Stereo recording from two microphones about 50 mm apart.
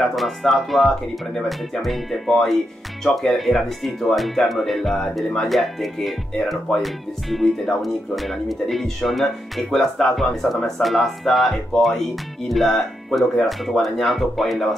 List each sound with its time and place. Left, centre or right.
0.1 s speech: centre